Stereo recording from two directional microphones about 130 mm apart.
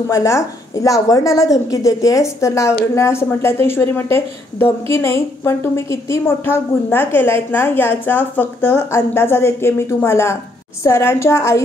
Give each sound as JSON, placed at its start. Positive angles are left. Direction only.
{"t": 0.1, "sound": "a woman's voice", "side_deg": 25}